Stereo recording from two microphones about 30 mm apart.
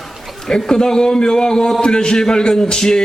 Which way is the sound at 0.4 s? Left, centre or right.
Left.